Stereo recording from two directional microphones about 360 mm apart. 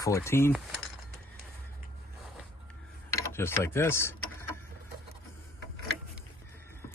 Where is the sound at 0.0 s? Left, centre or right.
Centre.